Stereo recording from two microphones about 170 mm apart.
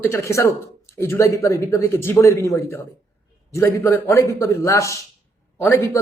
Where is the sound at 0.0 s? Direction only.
15° left (ahead or behind).